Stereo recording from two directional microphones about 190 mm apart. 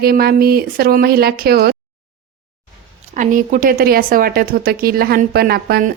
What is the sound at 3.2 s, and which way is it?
Speech, 45° right (ahead or behind).